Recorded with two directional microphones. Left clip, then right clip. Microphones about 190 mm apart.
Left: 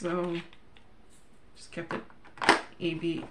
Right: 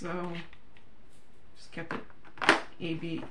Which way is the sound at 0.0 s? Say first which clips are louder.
Left 5 dB; 25° left (ahead or behind).